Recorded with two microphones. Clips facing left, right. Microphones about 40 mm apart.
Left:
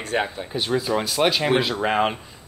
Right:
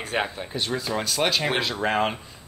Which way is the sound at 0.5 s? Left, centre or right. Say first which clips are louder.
Left 7 dB; centre.